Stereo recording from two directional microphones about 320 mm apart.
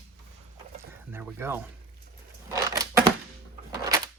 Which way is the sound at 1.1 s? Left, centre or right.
Centre.